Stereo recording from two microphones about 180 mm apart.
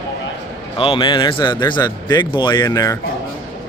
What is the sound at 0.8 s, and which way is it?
Speech, 30° left (ahead or behind).